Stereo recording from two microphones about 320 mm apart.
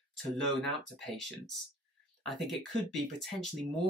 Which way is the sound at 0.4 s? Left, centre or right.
Centre.